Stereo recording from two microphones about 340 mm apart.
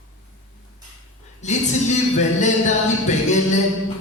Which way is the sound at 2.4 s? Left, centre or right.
Left.